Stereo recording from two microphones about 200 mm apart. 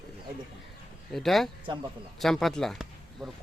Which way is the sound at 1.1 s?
Centre (ahead or behind).